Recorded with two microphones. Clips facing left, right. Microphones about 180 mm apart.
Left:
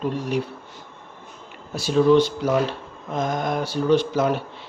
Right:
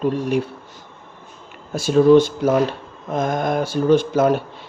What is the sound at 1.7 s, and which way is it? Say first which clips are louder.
Speech: right 4 dB; 50° right (ahead or behind).